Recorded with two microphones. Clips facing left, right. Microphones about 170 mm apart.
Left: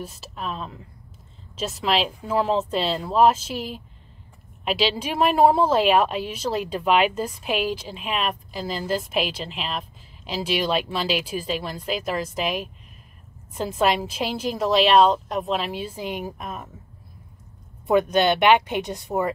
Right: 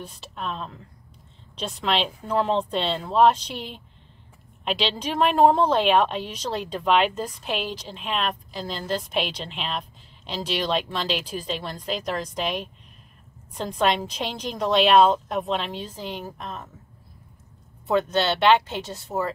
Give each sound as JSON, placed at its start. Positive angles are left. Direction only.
{"t": 0.0, "sound": "a woman's voice", "side_deg": 5}
{"t": 17.8, "sound": "a woman's voice", "side_deg": 15}